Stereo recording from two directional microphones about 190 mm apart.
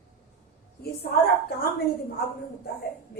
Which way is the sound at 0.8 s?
55° left (ahead or behind).